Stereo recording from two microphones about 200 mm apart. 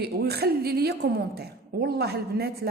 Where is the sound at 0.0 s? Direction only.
55° right (ahead or behind).